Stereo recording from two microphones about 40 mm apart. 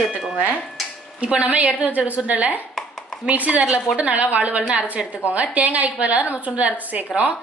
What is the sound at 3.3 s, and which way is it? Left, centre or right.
A woman's voice, right.